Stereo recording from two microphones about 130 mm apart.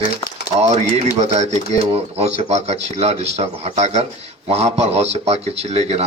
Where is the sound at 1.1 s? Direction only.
60° right (ahead or behind).